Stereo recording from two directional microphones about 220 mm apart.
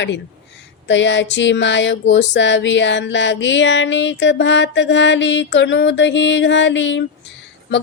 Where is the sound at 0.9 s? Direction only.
55° left (ahead or behind).